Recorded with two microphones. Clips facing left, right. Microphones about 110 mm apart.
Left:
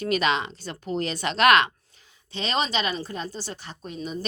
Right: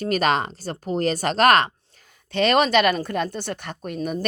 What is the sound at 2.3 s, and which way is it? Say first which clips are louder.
A woman's voice: right 9 dB; 60° right (ahead or behind).